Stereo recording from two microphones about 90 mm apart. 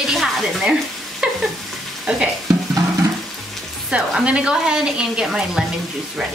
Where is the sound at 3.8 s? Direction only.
10° right (ahead or behind).